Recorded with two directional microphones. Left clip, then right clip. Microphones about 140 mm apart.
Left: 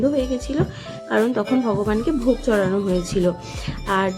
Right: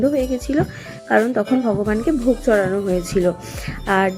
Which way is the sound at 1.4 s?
Centre (ahead or behind).